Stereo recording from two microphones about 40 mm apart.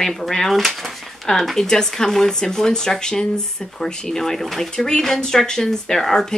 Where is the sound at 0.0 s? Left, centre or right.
Centre.